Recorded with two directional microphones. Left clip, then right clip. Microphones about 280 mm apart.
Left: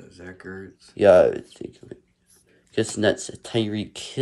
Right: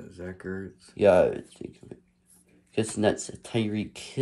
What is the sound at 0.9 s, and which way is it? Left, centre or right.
Speech, centre.